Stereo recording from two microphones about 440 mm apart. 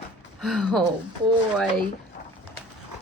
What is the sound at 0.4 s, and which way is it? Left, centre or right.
Speech, centre.